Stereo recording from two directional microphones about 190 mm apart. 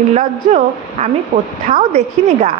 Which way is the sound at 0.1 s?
35° right (ahead or behind).